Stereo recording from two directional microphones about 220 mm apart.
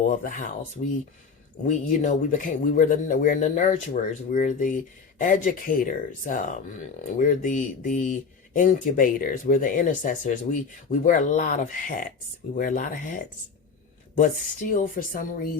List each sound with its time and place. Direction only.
0.0 s speech: 35° left (ahead or behind)
14.7 s speech: 40° left (ahead or behind)